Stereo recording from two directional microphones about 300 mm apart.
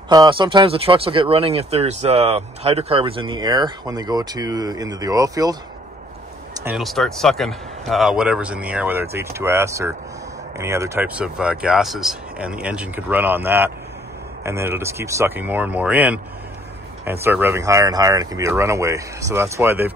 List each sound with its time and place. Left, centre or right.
0.1 s speech: centre